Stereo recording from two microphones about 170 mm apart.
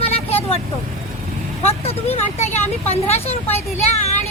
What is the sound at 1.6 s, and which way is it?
Speech, 40° left (ahead or behind).